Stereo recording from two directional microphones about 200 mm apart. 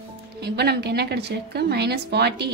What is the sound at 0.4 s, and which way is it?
A woman's voice, 55° right (ahead or behind).